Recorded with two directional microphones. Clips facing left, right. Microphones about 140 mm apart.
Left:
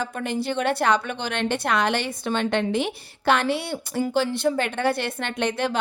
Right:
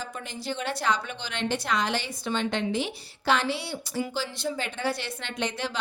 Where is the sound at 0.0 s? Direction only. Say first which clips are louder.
Left 9 dB; 60° left (ahead or behind).